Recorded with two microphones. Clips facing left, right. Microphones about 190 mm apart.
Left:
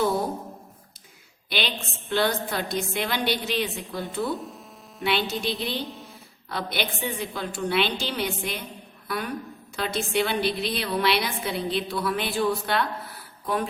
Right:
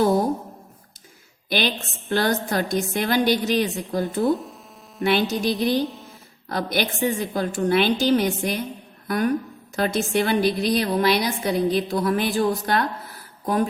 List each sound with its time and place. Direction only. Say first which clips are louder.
1.5 s a woman's voice: right 5 dB; 45° right (ahead or behind)
5.3 s a woman's voice: right 7 dB; 45° right (ahead or behind)